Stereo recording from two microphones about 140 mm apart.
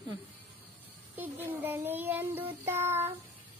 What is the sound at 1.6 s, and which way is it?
Child singing, 15° right (ahead or behind).